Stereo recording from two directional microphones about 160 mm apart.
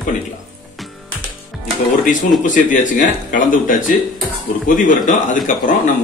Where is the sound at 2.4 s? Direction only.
55° left (ahead or behind).